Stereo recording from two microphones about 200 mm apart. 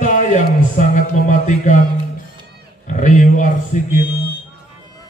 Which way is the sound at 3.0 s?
40° left (ahead or behind).